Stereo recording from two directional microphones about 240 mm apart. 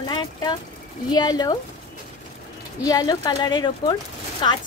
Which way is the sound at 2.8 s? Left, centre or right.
Centre.